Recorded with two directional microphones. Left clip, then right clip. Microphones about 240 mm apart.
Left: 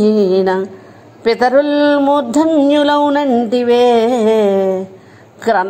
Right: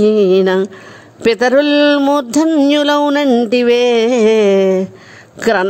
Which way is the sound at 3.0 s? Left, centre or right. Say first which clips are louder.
Right 1 dB; right.